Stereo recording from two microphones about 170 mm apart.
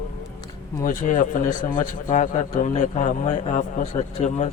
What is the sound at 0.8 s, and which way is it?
A man's voice, 50° left (ahead or behind).